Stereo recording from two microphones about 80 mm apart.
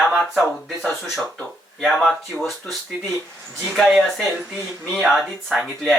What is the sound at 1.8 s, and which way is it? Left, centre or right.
Speech, centre.